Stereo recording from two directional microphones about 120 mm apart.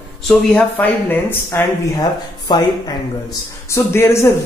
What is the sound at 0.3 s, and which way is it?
Speech, 10° left (ahead or behind).